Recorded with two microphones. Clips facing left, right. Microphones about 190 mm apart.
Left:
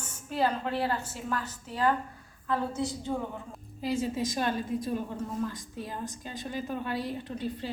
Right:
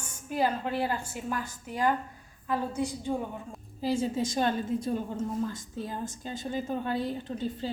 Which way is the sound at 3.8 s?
30° right (ahead or behind).